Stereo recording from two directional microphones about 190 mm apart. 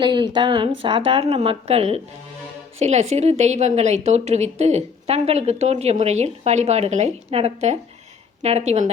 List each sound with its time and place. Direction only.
0.0 s a woman's voice: 25° right (ahead or behind)